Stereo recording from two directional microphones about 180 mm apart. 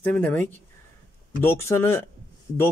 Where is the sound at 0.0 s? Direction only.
5° left (ahead or behind).